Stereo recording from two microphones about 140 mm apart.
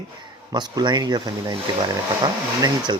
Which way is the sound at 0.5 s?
30° right (ahead or behind).